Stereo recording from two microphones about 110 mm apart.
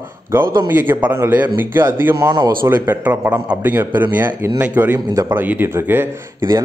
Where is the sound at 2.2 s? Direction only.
40° right (ahead or behind).